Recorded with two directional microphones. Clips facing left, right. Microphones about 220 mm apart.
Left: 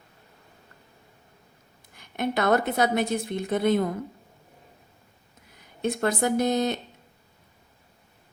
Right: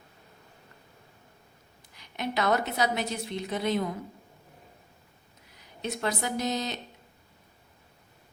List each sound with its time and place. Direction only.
1.9 s a woman's voice: 50° left (ahead or behind)
5.8 s a woman's voice: 50° left (ahead or behind)